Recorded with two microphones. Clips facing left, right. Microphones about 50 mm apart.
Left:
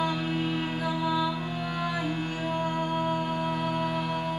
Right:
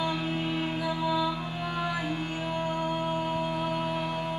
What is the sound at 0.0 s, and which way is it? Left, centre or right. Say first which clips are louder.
Music: left 1 dB; centre.